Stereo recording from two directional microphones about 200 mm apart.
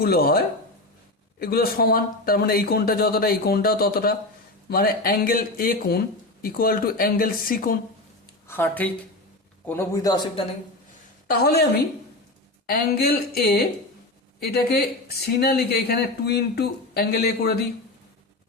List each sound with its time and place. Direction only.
0.0 s speech: 50° left (ahead or behind)
8.4 s a man's voice: 10° left (ahead or behind)
11.3 s speech: 50° left (ahead or behind)
12.6 s speech: 50° left (ahead or behind)